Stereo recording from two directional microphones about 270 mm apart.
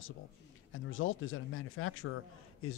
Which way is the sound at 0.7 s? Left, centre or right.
Left.